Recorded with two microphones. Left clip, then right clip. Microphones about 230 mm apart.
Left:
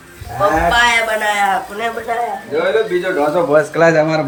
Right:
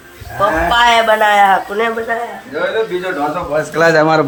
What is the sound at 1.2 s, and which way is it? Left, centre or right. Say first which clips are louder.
Speech: right 5 dB; centre.